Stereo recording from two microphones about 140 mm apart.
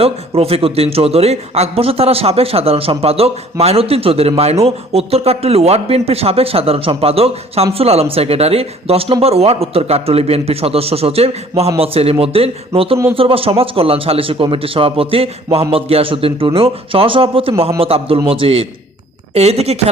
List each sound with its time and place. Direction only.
0.0 s a man's voice: 45° right (ahead or behind)